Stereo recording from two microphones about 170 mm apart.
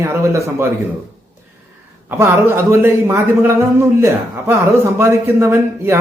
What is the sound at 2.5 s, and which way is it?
Speech, 15° right (ahead or behind).